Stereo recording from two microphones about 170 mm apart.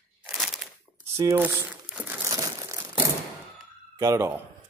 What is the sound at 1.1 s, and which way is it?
Speech, 15° right (ahead or behind).